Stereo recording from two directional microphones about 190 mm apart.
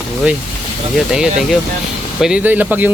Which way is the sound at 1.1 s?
Centre (ahead or behind).